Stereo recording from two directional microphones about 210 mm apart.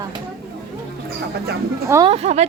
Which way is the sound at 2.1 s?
30° right (ahead or behind).